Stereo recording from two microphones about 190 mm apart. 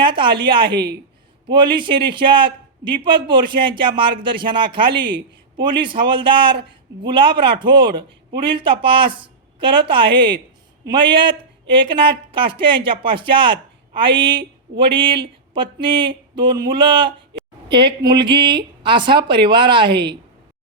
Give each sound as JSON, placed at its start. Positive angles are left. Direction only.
{"t": 0.0, "sound": "a man's voice", "side_deg": -25}